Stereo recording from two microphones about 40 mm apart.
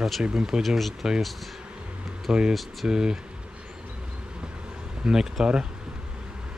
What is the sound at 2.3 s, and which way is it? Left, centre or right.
Speech, right.